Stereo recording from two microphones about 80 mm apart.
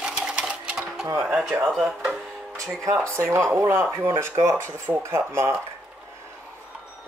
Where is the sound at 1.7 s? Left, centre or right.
Centre.